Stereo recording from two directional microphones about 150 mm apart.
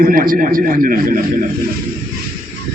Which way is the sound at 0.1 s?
70° right (ahead or behind).